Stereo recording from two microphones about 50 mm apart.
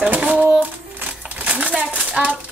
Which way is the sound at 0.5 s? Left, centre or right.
Right.